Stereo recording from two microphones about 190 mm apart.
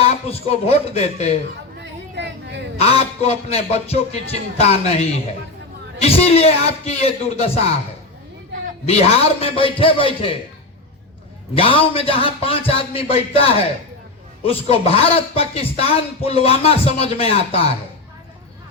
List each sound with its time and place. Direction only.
0.0 s a man's voice: 30° left (ahead or behind)
1.8 s a sound: 65° right (ahead or behind)
2.8 s a man's voice: 35° left (ahead or behind)
8.9 s speech: 30° left (ahead or behind)
11.5 s a man's voice: 30° left (ahead or behind)